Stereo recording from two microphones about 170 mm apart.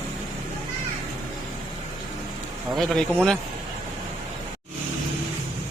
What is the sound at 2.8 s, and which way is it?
Speech, 5° left (ahead or behind).